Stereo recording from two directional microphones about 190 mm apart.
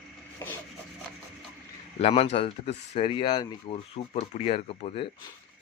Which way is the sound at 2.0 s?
30° left (ahead or behind).